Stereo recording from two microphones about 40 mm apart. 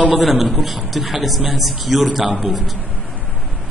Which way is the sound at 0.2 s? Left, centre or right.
Centre.